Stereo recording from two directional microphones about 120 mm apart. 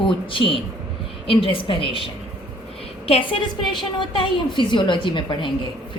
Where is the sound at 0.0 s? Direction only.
45° left (ahead or behind).